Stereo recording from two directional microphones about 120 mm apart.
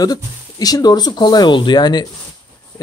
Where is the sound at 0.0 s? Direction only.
30° left (ahead or behind).